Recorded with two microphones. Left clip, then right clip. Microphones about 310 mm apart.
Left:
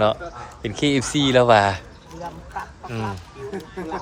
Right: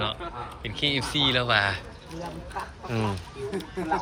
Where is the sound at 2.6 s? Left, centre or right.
Centre.